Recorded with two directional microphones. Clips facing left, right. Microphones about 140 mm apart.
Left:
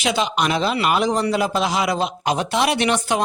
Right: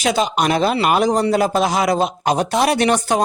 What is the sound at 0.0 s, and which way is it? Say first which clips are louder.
Speech: right 3 dB; 40° right (ahead or behind).